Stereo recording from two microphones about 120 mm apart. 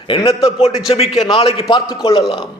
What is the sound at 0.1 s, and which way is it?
A man's voice, 50° left (ahead or behind).